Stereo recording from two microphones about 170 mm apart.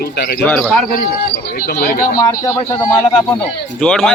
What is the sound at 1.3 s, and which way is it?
Speech, 60° left (ahead or behind).